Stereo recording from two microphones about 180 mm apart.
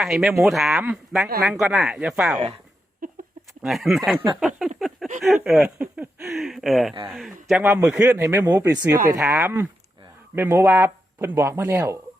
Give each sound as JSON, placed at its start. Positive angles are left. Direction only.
{"t": 0.0, "sound": "speech", "side_deg": 0}
{"t": 3.6, "sound": "a man's voice", "side_deg": 0}
{"t": 7.7, "sound": "speech", "side_deg": -15}